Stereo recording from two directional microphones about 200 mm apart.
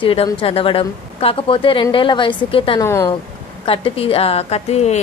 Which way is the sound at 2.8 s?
15° left (ahead or behind).